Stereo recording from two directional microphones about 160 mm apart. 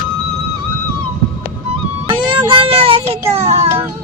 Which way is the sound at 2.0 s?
30° right (ahead or behind).